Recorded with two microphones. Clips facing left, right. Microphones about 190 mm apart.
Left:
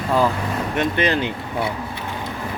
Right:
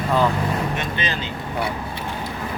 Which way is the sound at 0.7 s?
60° left (ahead or behind).